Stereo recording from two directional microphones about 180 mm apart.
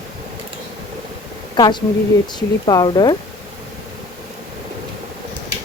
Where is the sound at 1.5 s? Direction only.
25° left (ahead or behind).